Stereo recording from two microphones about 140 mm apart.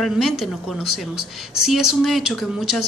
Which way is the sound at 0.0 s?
Centre (ahead or behind).